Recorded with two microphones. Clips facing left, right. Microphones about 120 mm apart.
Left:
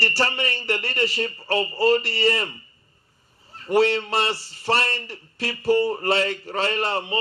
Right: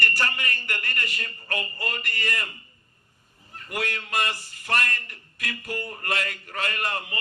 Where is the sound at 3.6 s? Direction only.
30° left (ahead or behind).